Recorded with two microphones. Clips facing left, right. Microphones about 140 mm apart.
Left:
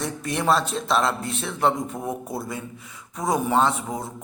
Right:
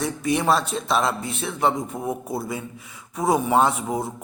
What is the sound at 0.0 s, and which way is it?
A man's voice, centre (ahead or behind).